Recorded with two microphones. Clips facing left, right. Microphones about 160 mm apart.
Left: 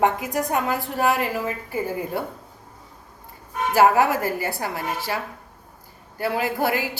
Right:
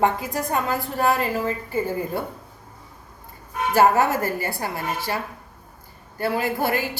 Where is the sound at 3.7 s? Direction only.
10° left (ahead or behind).